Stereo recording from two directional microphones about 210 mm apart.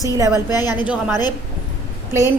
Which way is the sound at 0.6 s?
20° left (ahead or behind).